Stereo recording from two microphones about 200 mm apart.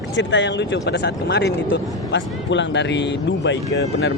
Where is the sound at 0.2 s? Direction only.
65° left (ahead or behind).